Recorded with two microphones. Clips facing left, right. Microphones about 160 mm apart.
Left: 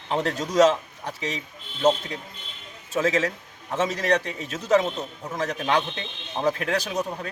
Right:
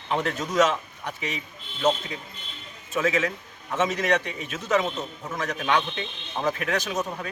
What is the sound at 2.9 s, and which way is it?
A man's voice, 35° left (ahead or behind).